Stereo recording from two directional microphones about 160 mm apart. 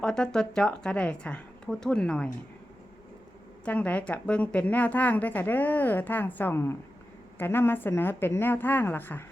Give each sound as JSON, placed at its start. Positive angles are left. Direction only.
{"t": 0.0, "sound": "speech", "side_deg": 5}
{"t": 3.6, "sound": "a woman's voice", "side_deg": 10}